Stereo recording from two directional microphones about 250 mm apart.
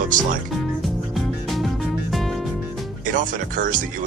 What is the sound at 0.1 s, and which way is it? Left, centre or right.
Speech, right.